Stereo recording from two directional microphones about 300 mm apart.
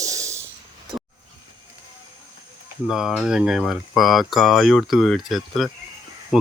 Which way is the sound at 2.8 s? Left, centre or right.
Centre.